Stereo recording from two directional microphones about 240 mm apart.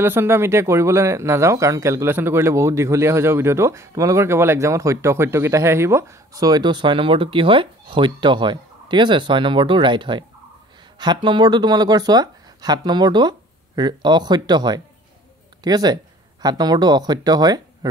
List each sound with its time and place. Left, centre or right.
0.0 s speech: centre